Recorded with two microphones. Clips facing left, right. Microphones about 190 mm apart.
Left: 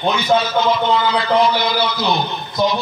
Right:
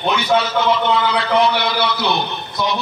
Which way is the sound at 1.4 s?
65° right (ahead or behind).